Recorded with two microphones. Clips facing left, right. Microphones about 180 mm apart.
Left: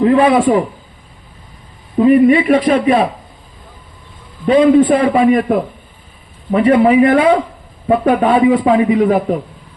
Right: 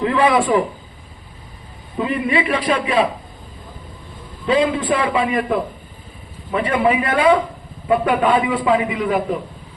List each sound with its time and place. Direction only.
0.0 s a man's voice: 35° left (ahead or behind)
2.0 s a man's voice: 45° left (ahead or behind)
4.4 s a man's voice: 40° left (ahead or behind)
6.5 s a man's voice: 35° left (ahead or behind)